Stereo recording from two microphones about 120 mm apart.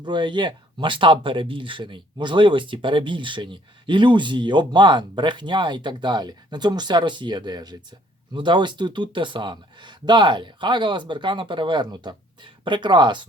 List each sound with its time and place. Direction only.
0.0 s speech: 40° right (ahead or behind)